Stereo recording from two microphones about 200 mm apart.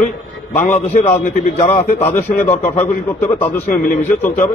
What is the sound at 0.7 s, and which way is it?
Speech, 35° left (ahead or behind).